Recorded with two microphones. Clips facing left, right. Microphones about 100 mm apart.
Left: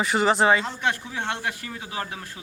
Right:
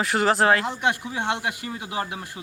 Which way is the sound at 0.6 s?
15° right (ahead or behind).